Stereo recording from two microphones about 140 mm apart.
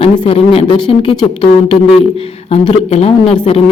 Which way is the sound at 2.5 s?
45° left (ahead or behind).